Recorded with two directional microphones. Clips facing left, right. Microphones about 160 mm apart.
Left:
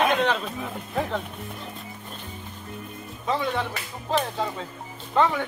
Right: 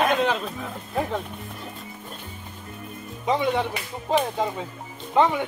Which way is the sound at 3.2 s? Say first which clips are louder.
Right 3 dB; 15° right (ahead or behind).